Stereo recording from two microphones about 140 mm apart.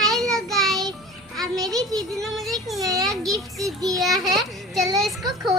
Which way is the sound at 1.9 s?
5° left (ahead or behind).